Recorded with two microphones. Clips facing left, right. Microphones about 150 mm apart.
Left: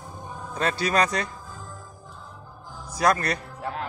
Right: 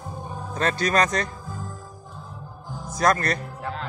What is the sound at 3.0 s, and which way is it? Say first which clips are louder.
Speech: right 1 dB; 10° left (ahead or behind).